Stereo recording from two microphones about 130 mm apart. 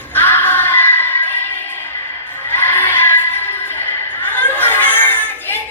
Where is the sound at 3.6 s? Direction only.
15° left (ahead or behind).